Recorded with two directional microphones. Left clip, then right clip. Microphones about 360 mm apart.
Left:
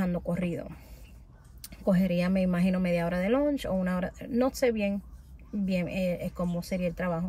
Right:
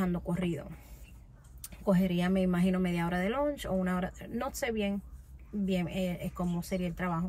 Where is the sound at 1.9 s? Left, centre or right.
Centre.